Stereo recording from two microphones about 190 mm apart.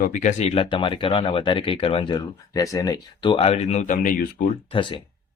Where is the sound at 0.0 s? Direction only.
40° left (ahead or behind).